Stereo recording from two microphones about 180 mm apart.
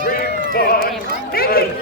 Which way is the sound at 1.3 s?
55° left (ahead or behind).